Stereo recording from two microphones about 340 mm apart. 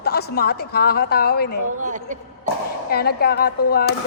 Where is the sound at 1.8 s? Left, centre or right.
Right.